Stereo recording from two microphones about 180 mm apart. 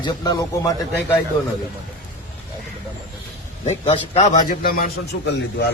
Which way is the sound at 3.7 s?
35° left (ahead or behind).